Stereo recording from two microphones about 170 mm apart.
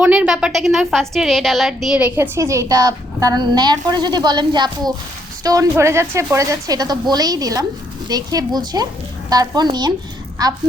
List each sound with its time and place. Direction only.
0.0 s a woman's voice: 5° right (ahead or behind)